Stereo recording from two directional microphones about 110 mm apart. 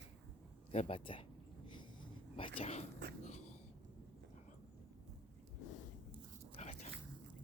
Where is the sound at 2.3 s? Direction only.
55° left (ahead or behind); by 3.4 s 85° left.